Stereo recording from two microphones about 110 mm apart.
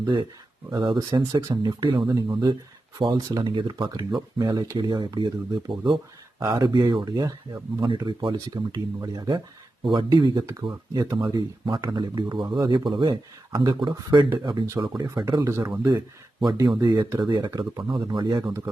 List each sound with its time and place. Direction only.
0.0 s speech: 40° right (ahead or behind)
2.0 s speech: 30° right (ahead or behind)
3.0 s speech: 45° right (ahead or behind)
7.9 s speech: 45° right (ahead or behind)
9.8 s speech: 55° right (ahead or behind)
10.1 s speech: 45° right (ahead or behind)
14.8 s speech: 35° right (ahead or behind)
15.4 s speech: 25° right (ahead or behind)
16.5 s speech: 40° right (ahead or behind)